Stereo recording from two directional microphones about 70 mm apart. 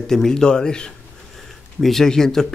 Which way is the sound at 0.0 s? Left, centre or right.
Centre.